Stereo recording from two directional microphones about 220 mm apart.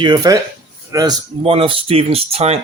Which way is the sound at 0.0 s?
20° right (ahead or behind).